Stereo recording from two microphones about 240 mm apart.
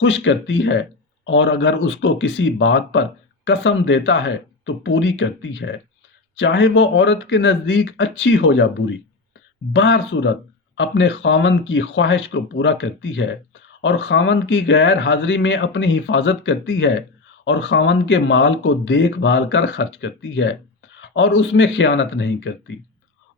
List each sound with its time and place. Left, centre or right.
0.0 s speech: left